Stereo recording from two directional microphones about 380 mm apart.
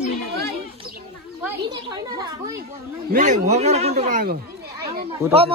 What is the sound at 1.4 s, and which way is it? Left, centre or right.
A woman's voice, centre.